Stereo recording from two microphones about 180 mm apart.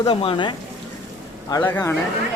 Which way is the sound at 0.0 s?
30° left (ahead or behind).